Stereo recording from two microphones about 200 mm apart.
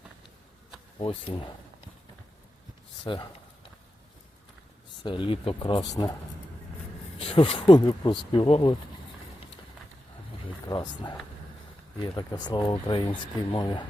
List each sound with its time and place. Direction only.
0.9 s speech: 25° left (ahead or behind)
3.0 s speech: 25° left (ahead or behind)
5.0 s speech: 25° left (ahead or behind)
7.2 s speech: 25° left (ahead or behind)
10.7 s speech: 20° left (ahead or behind)